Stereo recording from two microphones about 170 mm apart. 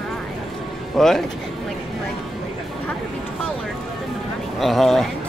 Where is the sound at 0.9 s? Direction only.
Centre (ahead or behind).